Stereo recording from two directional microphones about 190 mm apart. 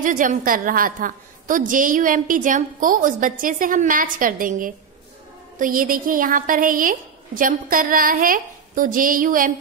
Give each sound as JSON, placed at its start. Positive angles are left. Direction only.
{"t": 0.0, "sound": "a woman's voice", "side_deg": -45}